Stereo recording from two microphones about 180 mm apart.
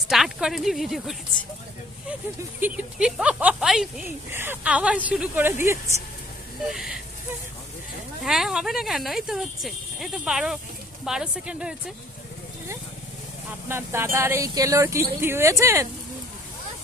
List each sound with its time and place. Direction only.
0.1 s speech: 5° right (ahead or behind)
2.6 s speech: 10° right (ahead or behind)
4.3 s speech: 10° right (ahead or behind)
6.7 s speech: centre (ahead or behind)
8.2 s speech: centre (ahead or behind)
13.7 s speech: 15° right (ahead or behind)